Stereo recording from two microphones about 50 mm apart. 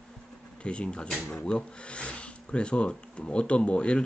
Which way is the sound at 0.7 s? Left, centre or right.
Centre.